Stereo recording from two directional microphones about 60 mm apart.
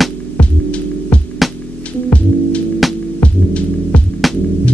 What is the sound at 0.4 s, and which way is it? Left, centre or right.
Music, left.